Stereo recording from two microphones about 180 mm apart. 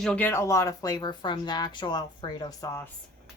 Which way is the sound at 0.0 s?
5° left (ahead or behind).